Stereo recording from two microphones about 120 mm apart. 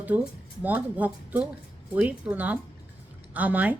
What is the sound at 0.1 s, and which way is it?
Speech, 15° right (ahead or behind).